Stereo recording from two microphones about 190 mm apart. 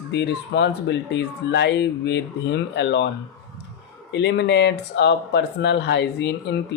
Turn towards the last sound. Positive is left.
turn(degrees=65)  # may be behind; listen again after turning